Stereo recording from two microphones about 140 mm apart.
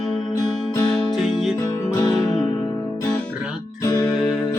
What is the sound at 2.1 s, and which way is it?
Music, centre (ahead or behind).